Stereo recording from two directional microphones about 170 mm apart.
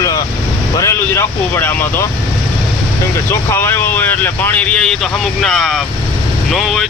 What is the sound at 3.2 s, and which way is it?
Speech, 10° left (ahead or behind).